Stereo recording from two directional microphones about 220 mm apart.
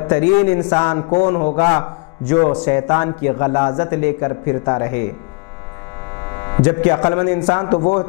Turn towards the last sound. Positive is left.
turn(degrees=20)  # may be behind; listen again after turning